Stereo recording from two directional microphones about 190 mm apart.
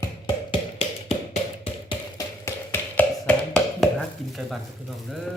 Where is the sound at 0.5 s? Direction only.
30° left (ahead or behind).